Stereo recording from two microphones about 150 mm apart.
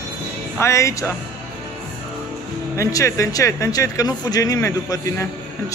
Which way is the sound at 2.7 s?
20° left (ahead or behind).